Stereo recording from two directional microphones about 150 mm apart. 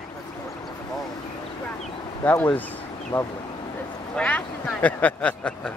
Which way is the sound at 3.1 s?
30° left (ahead or behind).